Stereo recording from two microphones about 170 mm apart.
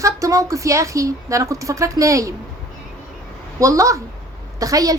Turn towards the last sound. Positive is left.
turn(degrees=-20)  # may be behind; listen again after turning